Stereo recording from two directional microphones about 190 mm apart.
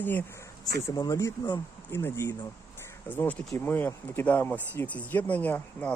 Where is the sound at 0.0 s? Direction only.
10° left (ahead or behind).